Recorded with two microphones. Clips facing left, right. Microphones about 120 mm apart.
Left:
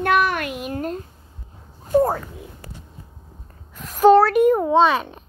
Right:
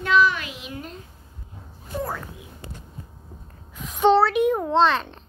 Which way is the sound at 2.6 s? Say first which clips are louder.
Even; 25° right (ahead or behind).